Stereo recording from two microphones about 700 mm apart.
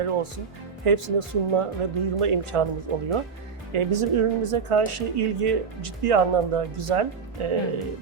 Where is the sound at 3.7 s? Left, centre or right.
Right.